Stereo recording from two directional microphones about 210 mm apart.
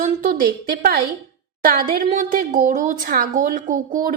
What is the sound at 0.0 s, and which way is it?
A woman's voice, 40° right (ahead or behind).